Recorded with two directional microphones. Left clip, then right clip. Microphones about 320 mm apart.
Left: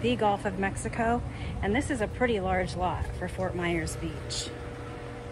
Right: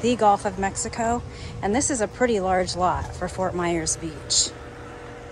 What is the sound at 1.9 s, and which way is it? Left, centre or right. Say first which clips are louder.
Speech: right 5 dB; right.